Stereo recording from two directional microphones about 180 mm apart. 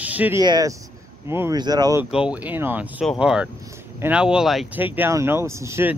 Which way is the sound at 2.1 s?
5° right (ahead or behind).